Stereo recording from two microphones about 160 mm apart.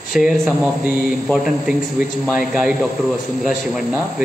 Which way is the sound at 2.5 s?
5° right (ahead or behind).